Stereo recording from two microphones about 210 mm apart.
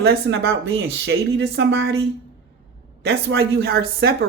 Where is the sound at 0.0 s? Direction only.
50° right (ahead or behind).